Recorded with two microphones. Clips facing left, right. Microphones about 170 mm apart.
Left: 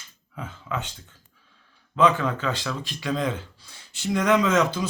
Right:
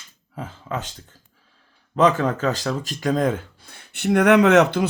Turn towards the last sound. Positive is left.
turn(degrees=-65)  # may be behind; listen again after turning